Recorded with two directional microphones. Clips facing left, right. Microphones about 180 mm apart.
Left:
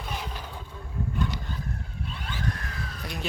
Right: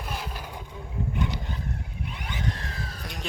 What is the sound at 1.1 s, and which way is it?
Wild animals, 20° right (ahead or behind).